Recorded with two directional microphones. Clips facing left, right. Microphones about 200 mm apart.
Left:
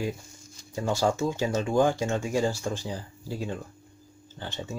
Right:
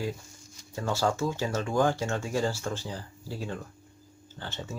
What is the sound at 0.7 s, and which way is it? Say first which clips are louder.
Speech: left 2 dB; 15° left (ahead or behind).